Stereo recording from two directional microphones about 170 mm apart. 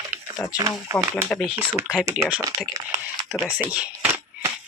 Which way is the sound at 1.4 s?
10° right (ahead or behind).